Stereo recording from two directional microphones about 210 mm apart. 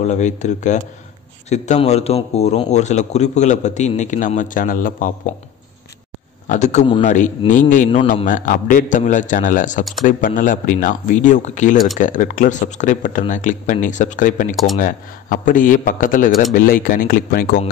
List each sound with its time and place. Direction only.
0.0 s a man's voice: 35° left (ahead or behind)
6.4 s a man's voice: 35° left (ahead or behind)
8.3 s a man's voice: 40° left (ahead or behind)